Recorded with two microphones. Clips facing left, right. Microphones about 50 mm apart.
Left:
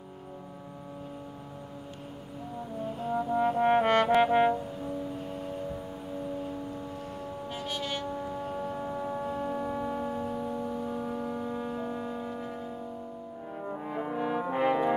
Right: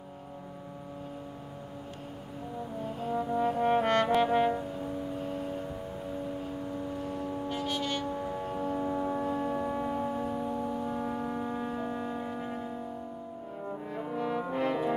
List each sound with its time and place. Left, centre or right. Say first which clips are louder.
3.1 s brass instrument: left 2 dB; centre
4.2 s music: left 3 dB; centre
7.0 s vehicle: right 4 dB; centre
8.3 s foghorn: right 1 dB; centre
8.9 s church bell: right 2 dB; centre
13.6 s brass instrument: left 3 dB; centre